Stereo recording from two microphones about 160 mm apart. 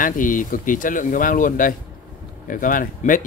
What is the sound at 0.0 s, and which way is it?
Speech, 55° left (ahead or behind).